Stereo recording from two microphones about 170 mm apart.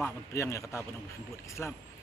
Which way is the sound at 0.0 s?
15° left (ahead or behind).